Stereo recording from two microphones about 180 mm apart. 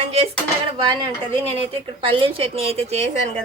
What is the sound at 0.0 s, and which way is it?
Dishes, 35° right (ahead or behind).